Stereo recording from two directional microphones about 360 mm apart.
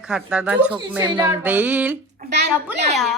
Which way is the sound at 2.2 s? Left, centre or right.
Right.